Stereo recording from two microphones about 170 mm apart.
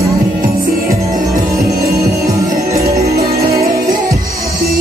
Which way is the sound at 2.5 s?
45° right (ahead or behind).